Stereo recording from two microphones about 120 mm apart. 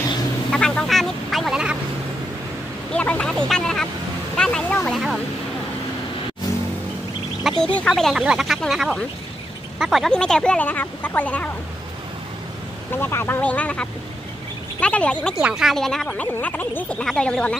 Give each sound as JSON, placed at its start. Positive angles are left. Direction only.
{"t": 0.5, "sound": "a sound", "side_deg": 5}
{"t": 2.9, "sound": "vehicle", "side_deg": 10}
{"t": 4.4, "sound": "a sound", "side_deg": 5}
{"t": 4.8, "sound": "vehicle", "side_deg": 0}
{"t": 7.7, "sound": "speech", "side_deg": 5}
{"t": 12.9, "sound": "speech", "side_deg": 20}
{"t": 15.3, "sound": "speech", "side_deg": -5}